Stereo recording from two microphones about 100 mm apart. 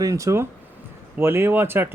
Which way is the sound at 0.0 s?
30° right (ahead or behind).